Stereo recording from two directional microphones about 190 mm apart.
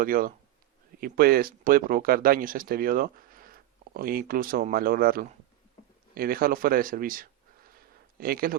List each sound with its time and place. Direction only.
0.0 s speech: 50° right (ahead or behind)